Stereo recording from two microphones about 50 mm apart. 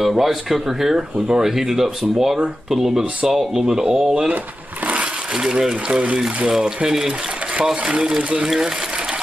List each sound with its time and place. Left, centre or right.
0.0 s speech: centre
5.3 s speech: centre
5.9 s speech: right
6.1 s speech: centre
8.2 s speech: right